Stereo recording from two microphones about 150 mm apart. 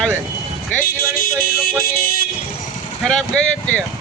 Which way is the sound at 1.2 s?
75° left (ahead or behind).